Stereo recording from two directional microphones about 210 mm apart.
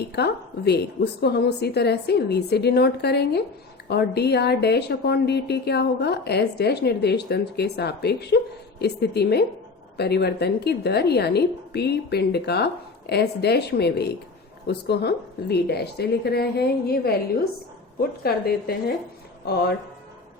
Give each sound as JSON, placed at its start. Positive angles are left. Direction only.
{"t": 0.2, "sound": "a woman's voice", "side_deg": 50}